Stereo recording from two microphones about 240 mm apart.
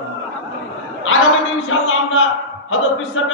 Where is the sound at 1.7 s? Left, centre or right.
Left.